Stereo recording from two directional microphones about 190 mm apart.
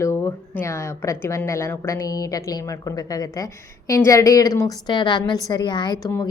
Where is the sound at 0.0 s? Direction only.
15° left (ahead or behind).